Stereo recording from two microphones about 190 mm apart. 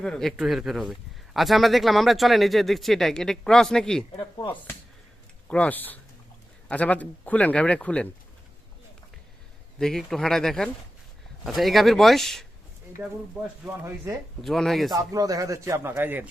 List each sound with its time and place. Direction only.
0.0 s speech: 5° left (ahead or behind)
4.2 s speech: 25° left (ahead or behind)
5.5 s a man's voice: 5° left (ahead or behind)
9.7 s speech: centre (ahead or behind)
14.4 s speech: centre (ahead or behind)
14.9 s speech: 15° right (ahead or behind)